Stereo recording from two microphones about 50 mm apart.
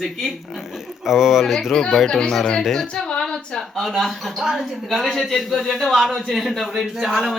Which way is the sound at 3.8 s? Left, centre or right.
Centre.